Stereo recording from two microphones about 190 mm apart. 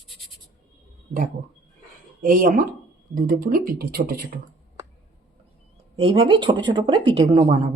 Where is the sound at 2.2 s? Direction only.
45° right (ahead or behind).